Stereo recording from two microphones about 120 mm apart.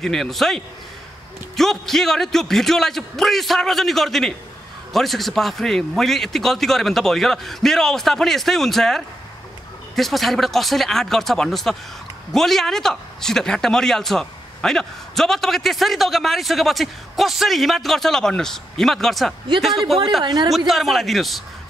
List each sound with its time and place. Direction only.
0.0 s speech: centre (ahead or behind)
1.6 s speech: 5° left (ahead or behind)
20.2 s a woman's voice: 35° right (ahead or behind)
20.5 s speech: centre (ahead or behind)